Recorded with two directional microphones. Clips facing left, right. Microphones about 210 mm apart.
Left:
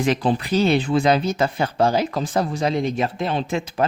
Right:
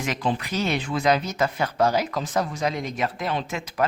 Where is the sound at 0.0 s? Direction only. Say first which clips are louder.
Left 6 dB; 35° left (ahead or behind).